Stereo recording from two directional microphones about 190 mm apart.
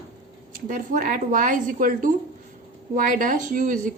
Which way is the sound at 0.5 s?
45° right (ahead or behind).